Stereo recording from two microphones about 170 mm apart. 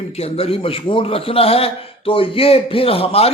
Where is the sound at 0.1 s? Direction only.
35° left (ahead or behind).